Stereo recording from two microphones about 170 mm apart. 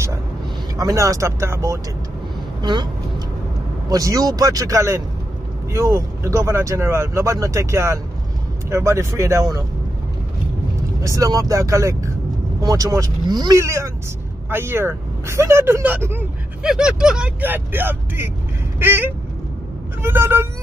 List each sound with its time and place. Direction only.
0.7 s speech: 20° right (ahead or behind)
3.9 s speech: 20° right (ahead or behind)
11.0 s speech: 20° right (ahead or behind)